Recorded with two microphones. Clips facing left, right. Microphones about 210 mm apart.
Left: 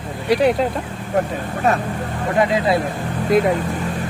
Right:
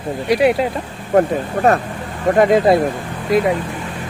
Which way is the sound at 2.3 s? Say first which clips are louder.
Right 5 dB; 50° right (ahead or behind).